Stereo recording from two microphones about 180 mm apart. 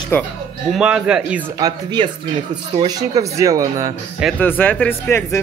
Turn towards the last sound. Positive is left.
turn(degrees=10)  # may be behind; listen again after turning